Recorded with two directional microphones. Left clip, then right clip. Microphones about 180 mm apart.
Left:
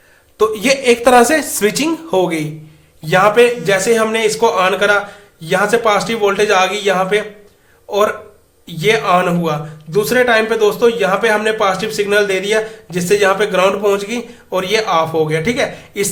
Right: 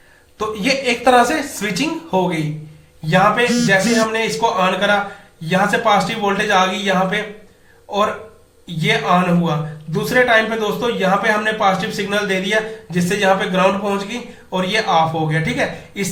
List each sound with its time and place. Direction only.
0.3 s a man's voice: 45° left (ahead or behind)
8.8 s a man's voice: 45° left (ahead or behind)